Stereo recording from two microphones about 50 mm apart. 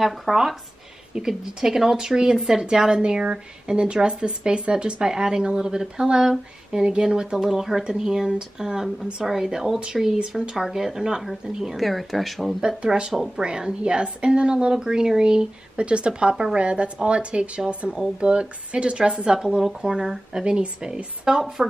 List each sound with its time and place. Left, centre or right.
0.0 s speech: centre
1.1 s speech: centre
12.6 s speech: centre